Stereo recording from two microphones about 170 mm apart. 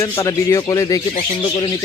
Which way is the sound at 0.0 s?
20° left (ahead or behind).